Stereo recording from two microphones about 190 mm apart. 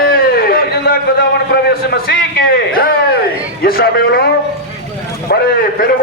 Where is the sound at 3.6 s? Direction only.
55° left (ahead or behind).